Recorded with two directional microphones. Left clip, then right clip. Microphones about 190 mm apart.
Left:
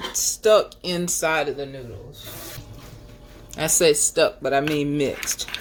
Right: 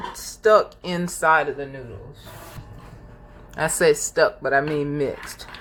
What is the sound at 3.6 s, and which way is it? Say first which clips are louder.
Speech: even; 50° left (ahead or behind).